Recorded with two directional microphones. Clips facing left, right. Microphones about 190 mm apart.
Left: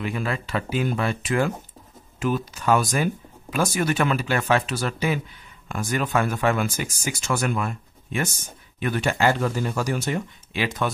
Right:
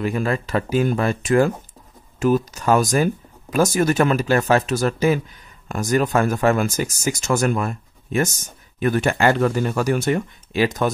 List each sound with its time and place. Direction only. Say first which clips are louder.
0.0 s speech: right 6 dB; 45° right (ahead or behind)
10.5 s speech: right 6 dB; 40° right (ahead or behind)